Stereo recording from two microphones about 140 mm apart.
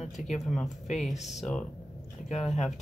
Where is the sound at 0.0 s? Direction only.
55° left (ahead or behind).